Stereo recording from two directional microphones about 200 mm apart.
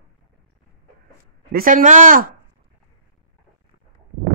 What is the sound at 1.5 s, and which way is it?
Speech, 45° right (ahead or behind).